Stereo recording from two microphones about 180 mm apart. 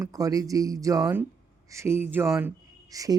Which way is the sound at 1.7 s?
15° right (ahead or behind).